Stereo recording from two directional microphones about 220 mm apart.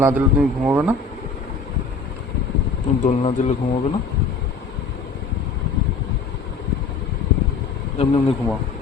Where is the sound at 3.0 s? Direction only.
30° left (ahead or behind).